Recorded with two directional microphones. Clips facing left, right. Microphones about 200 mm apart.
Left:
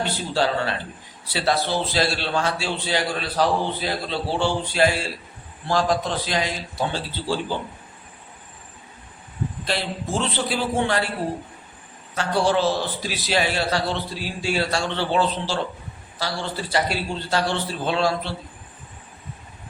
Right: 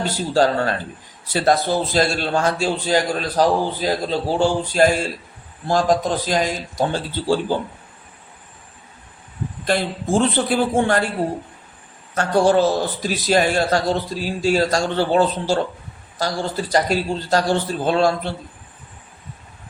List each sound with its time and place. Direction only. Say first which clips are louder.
0.0 s a man's voice: right 5 dB; 45° right (ahead or behind)
9.6 s a man's voice: right 8 dB; 50° right (ahead or behind)
12.1 s a man's voice: right 5 dB; 50° right (ahead or behind)